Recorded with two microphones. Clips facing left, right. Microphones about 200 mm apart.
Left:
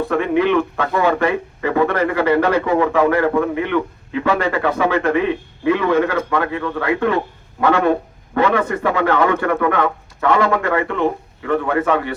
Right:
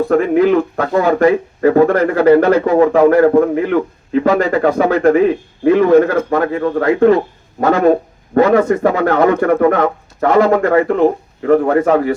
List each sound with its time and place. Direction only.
0.1 s speech: 40° right (ahead or behind)